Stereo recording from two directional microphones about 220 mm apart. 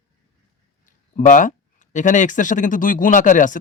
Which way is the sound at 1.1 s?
35° left (ahead or behind).